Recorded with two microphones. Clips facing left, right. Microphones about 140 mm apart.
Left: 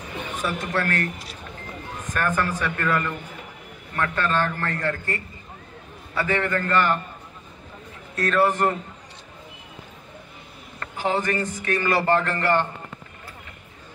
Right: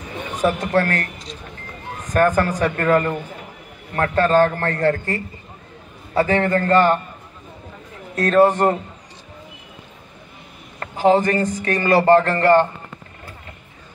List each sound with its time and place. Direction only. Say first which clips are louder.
0.4 s speech: right 9 dB; 50° right (ahead or behind)
2.1 s a man's voice: right 8 dB; 40° right (ahead or behind)
8.2 s a man's voice: right 6 dB; 35° right (ahead or behind)
10.8 s a man's voice: right 9 dB; 40° right (ahead or behind)